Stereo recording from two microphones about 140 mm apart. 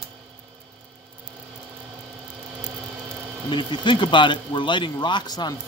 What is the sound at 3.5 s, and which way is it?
Speech, 35° left (ahead or behind).